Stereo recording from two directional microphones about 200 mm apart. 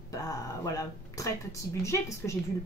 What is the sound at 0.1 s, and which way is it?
Speech, 15° left (ahead or behind).